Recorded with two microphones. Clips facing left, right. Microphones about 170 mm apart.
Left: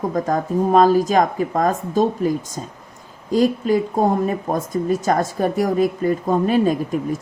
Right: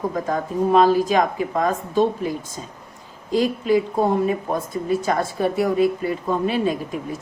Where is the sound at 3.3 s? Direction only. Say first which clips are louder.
Left 2 dB; 45° left (ahead or behind).